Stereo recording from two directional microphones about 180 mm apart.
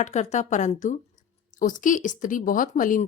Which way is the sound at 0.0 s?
40° left (ahead or behind).